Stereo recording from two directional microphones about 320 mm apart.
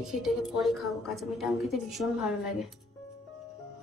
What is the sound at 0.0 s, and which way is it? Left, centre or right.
A woman's voice, centre.